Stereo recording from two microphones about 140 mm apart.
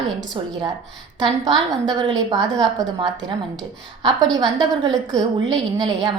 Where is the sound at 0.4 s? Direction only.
35° right (ahead or behind).